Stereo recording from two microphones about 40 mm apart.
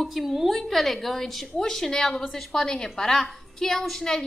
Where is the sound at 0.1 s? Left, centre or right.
Centre.